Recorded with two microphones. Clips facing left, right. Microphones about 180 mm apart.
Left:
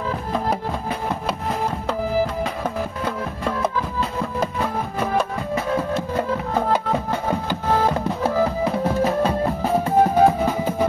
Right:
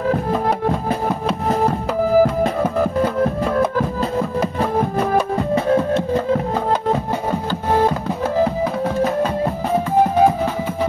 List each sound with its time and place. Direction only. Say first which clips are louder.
2.1 s music: right 11 dB; 45° right (ahead or behind)